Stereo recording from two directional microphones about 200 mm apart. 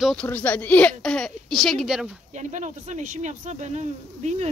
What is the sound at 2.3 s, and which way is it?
Speech, 35° right (ahead or behind).